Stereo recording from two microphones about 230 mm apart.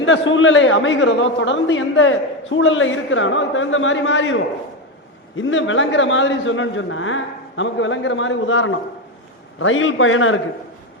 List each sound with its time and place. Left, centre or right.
0.0 s a man's voice: left
5.4 s a man's voice: left